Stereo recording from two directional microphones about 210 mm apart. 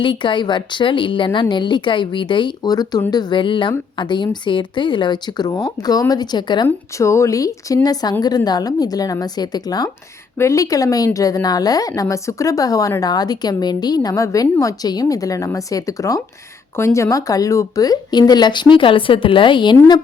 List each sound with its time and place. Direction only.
0.0 s a woman's voice: 25° left (ahead or behind)